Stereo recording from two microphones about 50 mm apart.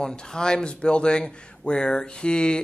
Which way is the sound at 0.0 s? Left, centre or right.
Centre.